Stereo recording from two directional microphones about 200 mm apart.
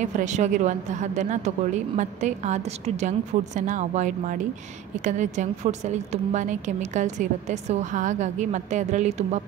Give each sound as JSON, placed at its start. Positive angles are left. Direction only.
{"t": 0.0, "sound": "a woman's voice", "side_deg": -35}